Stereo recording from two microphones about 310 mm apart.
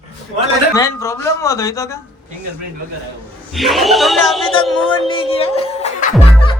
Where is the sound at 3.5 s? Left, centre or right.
Centre.